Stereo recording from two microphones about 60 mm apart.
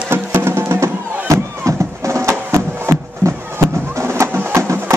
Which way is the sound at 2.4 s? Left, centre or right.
Right.